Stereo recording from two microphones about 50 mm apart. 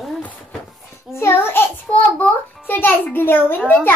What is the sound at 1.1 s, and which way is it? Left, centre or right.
Speech, left.